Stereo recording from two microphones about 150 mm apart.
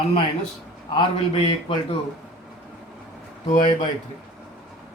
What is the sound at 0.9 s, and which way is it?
Speech, 35° left (ahead or behind).